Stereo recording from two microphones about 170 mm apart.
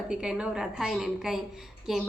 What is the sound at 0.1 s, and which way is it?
A woman's voice, 5° right (ahead or behind).